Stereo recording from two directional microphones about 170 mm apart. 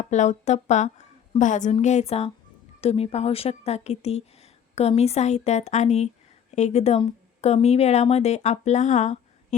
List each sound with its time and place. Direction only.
0.0 s a woman's voice: 45° left (ahead or behind)